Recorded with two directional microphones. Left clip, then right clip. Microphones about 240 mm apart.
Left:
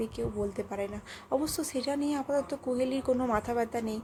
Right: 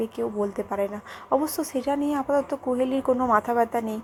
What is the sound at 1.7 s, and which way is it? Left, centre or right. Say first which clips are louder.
Speech: right 7 dB; centre.